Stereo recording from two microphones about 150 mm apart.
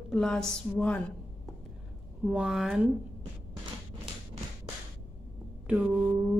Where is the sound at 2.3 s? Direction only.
5° right (ahead or behind).